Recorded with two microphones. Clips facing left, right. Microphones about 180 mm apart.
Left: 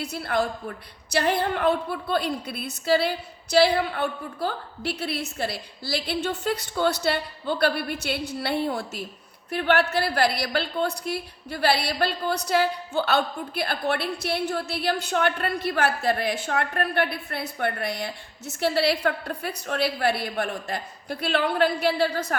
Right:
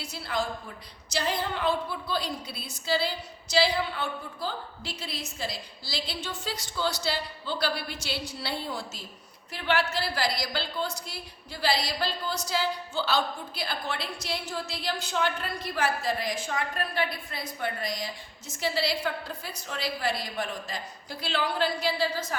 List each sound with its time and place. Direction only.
0.0 s a woman's voice: 60° left (ahead or behind)